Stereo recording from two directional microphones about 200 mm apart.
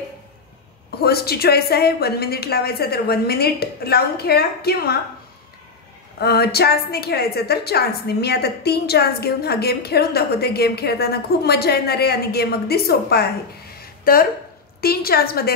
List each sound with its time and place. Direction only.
0.9 s a woman's voice: 50° left (ahead or behind)
6.1 s a woman's voice: 50° left (ahead or behind)